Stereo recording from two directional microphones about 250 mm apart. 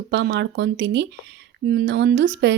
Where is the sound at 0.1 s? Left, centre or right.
Right.